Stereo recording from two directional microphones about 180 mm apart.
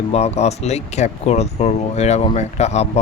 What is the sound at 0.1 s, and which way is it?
Speech, 35° left (ahead or behind).